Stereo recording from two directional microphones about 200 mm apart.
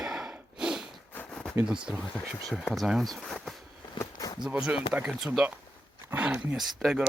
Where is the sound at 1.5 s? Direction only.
5° right (ahead or behind).